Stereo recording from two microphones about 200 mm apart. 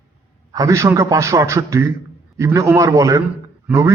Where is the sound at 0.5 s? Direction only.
15° right (ahead or behind).